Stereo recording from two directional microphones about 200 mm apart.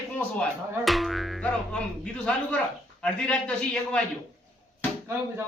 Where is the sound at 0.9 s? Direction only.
Centre (ahead or behind).